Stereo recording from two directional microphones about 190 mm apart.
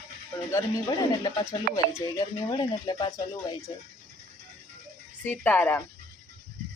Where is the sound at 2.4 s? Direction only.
25° left (ahead or behind).